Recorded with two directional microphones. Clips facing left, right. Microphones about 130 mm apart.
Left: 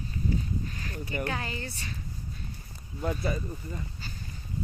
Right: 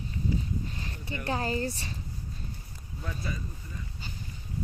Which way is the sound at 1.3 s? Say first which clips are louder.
Right 5 dB; 35° right (ahead or behind).